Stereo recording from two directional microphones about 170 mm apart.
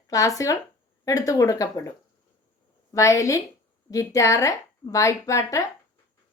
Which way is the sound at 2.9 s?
20° left (ahead or behind).